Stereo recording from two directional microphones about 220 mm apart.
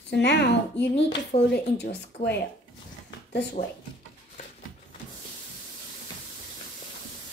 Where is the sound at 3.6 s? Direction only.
25° left (ahead or behind).